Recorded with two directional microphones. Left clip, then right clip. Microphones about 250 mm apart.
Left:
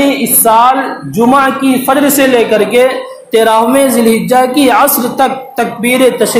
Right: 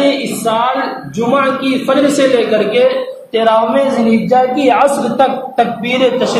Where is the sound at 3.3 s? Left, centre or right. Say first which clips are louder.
Left 3 dB; left.